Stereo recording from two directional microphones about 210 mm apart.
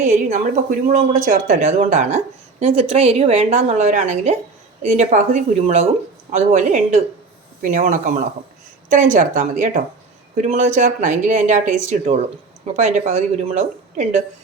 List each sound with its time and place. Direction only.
0.0 s a woman's voice: 35° right (ahead or behind)